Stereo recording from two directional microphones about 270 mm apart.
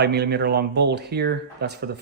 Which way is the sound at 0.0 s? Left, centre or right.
Right.